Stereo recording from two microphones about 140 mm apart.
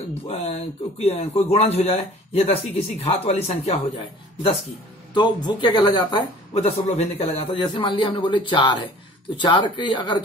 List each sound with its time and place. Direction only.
0.3 s speech: 50° left (ahead or behind)
5.1 s a man's voice: 30° left (ahead or behind)
6.5 s a man's voice: 45° left (ahead or behind); by 10.2 s 30° left (ahead or behind)